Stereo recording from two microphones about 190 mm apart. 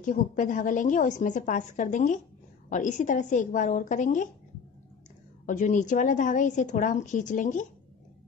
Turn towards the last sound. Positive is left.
turn(degrees=40)  # may be behind; listen again after turning